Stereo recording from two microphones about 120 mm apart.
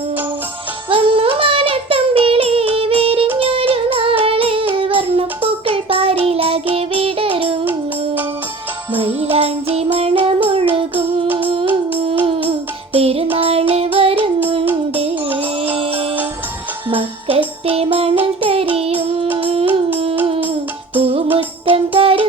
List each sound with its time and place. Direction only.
0.9 s music: 50° right (ahead or behind)
7.6 s child singing: 15° right (ahead or behind)
9.0 s jingle bell: 50° right (ahead or behind)
9.7 s music: 50° right (ahead or behind)
14.2 s child singing: 15° right (ahead or behind)
15.3 s music: 15° right (ahead or behind)
15.7 s music: 50° right (ahead or behind)
21.3 s music: 50° right (ahead or behind)